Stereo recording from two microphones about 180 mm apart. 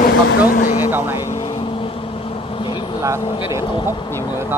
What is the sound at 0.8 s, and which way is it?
Speech, 10° right (ahead or behind).